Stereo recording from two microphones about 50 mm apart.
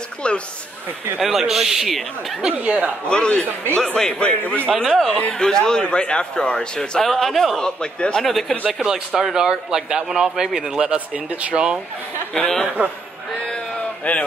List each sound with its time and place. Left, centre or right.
0.2 s a man's voice: left
1.2 s speech: centre
2.5 s speech: right
3.1 s a man's voice: centre
4.8 s speech: centre
5.3 s a man's voice: centre
7.6 s a man's voice: centre
8.3 s speech: centre
9.1 s speech: centre
10.9 s speech: right
12.4 s a man's voice: centre
14.0 s a man's voice: left